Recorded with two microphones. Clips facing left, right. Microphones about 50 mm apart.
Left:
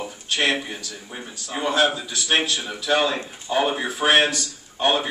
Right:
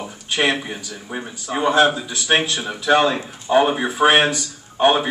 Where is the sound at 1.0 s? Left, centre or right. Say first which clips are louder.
Right 6 dB; right.